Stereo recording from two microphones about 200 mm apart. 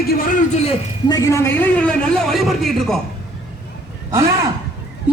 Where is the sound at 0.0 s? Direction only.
45° left (ahead or behind).